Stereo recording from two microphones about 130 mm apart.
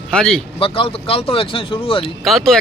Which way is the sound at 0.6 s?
45° left (ahead or behind).